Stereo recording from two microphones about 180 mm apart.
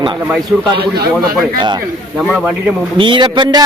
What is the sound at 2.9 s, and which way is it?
Speech, 25° right (ahead or behind).